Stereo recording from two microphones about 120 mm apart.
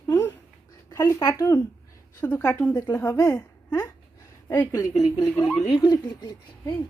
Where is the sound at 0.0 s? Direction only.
20° left (ahead or behind).